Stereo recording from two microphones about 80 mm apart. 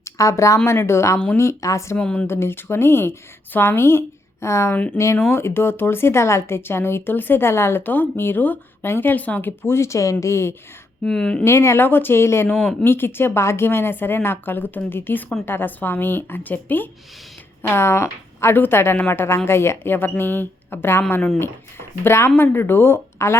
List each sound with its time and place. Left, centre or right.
0.0 s speech: left
2.0 s speech: centre
2.2 s speech: left
11.0 s speech: centre
11.4 s speech: left